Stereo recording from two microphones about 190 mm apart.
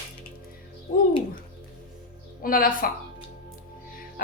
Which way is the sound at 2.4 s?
50° left (ahead or behind).